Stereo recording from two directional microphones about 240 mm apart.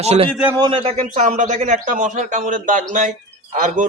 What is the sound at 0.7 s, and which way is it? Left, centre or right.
A man's voice, right.